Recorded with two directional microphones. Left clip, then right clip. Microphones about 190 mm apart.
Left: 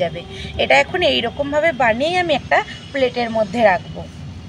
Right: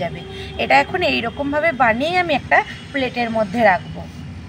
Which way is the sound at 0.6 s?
20° left (ahead or behind).